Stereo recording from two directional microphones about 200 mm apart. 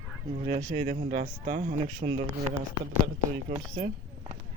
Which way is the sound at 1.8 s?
25° right (ahead or behind).